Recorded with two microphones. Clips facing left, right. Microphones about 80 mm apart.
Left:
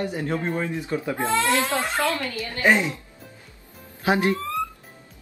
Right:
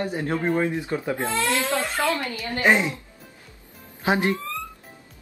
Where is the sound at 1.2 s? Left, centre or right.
Left.